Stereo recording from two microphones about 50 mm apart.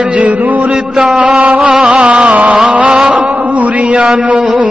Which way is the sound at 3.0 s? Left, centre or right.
Right.